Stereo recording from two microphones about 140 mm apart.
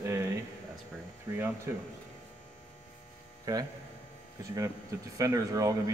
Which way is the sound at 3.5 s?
25° right (ahead or behind).